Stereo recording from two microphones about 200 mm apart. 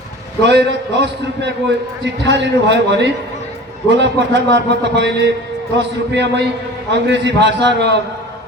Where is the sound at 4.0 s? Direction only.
60° right (ahead or behind).